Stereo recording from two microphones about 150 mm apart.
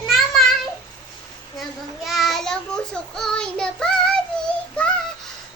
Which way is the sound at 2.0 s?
Centre (ahead or behind).